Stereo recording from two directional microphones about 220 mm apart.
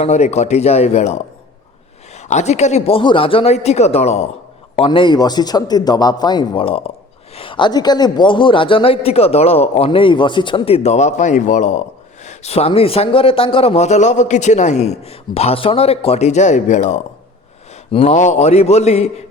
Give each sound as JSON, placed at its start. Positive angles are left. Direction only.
{"t": 0.0, "sound": "a man's voice", "side_deg": 30}